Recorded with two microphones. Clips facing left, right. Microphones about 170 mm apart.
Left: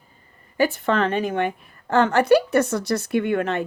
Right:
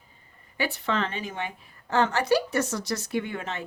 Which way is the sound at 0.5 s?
45° left (ahead or behind).